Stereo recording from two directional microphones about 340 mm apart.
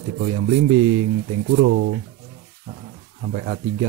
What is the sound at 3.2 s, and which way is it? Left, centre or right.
Speech, right.